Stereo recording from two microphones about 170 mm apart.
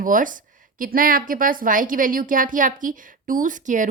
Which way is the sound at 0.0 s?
50° right (ahead or behind).